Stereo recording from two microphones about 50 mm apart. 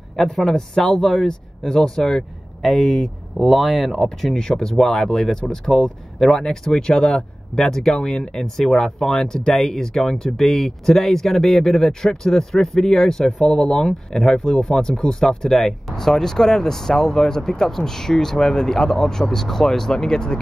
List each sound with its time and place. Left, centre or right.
0.1 s speech: centre